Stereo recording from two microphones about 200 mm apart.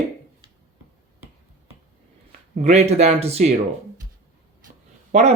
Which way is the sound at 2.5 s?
35° right (ahead or behind).